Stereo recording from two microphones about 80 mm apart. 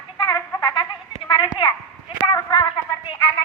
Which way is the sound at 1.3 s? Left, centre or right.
Left.